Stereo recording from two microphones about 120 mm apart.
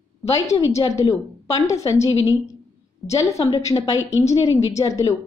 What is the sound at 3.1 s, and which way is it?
A woman's voice, 25° left (ahead or behind).